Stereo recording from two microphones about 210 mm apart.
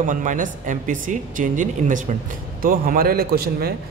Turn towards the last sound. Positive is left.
turn(degrees=-45)  # may be behind; listen again after turning